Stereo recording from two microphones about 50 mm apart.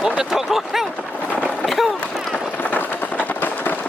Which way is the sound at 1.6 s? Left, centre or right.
Centre.